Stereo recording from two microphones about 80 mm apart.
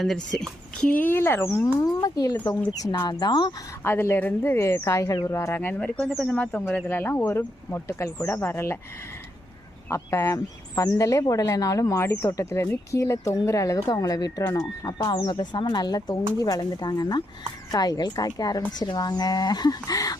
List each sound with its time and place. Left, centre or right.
0.0 s speech: centre
0.9 s speech: left
2.0 s speech: left
2.3 s speech: left
3.8 s speech: left
5.5 s speech: left
6.8 s speech: left
9.9 s speech: left
10.2 s speech: left
12.0 s speech: left
12.3 s speech: left
13.7 s speech: left
14.9 s speech: left
15.3 s speech: left